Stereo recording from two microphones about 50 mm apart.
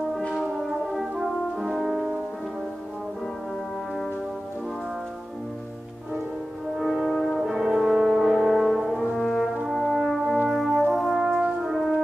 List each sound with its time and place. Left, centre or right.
0.3 s brass instrument: centre
6.8 s brass instrument: centre
11.2 s french horn: centre